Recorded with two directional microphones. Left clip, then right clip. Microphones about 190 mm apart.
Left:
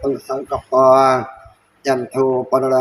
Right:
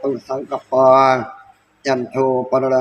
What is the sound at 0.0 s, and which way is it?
Speech, 15° right (ahead or behind).